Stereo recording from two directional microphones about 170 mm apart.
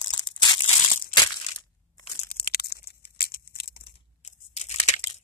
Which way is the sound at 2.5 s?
65° left (ahead or behind).